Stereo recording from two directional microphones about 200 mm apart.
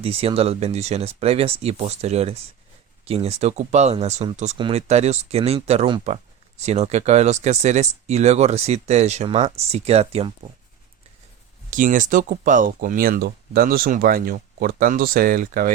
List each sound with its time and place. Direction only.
0.0 s speech: 30° right (ahead or behind)
11.7 s speech: 40° right (ahead or behind)